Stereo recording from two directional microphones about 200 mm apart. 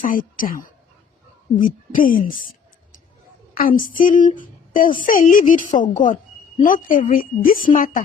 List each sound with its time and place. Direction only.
0.0 s a woman's voice: 45° left (ahead or behind)
3.5 s a woman's voice: 45° left (ahead or behind)